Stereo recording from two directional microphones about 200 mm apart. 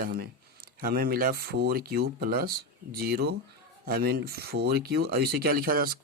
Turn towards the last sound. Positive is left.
turn(degrees=-45)  # may be behind; listen again after turning